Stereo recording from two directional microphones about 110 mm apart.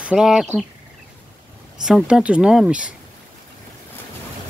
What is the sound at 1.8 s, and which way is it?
Speech, 5° right (ahead or behind).